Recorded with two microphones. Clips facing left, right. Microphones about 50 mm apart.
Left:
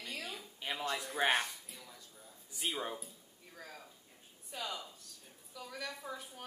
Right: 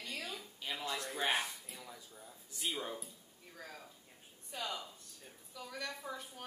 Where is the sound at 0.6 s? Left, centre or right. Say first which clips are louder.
Left 3 dB; left.